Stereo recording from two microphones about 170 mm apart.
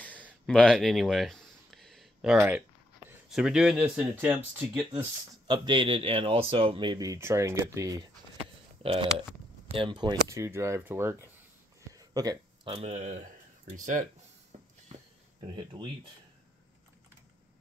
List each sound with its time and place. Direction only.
0.5 s speech: 5° left (ahead or behind)
5.5 s speech: 30° right (ahead or behind)
8.8 s speech: 35° right (ahead or behind); by 11.1 s 10° right (ahead or behind)
11.9 s a sound: 20° right (ahead or behind)
12.6 s speech: 40° right (ahead or behind)
14.5 s a sound: 40° right (ahead or behind)
15.5 s speech: 25° right (ahead or behind)